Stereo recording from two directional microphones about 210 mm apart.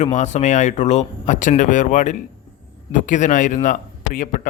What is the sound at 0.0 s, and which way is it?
Speech, 35° left (ahead or behind).